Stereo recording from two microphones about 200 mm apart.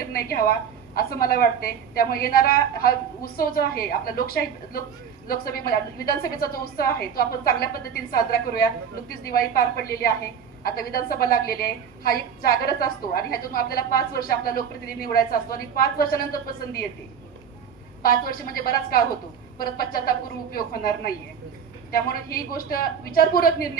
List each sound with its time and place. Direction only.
0.1 s a woman's voice: 50° left (ahead or behind)
18.3 s a woman's voice: 45° left (ahead or behind)